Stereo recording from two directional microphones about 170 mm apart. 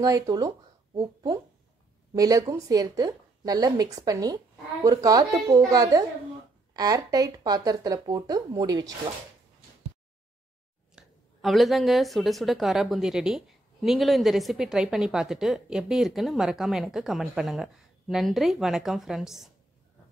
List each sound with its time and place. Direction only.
0.0 s speech: 20° right (ahead or behind)
11.0 s a woman's voice: centre (ahead or behind)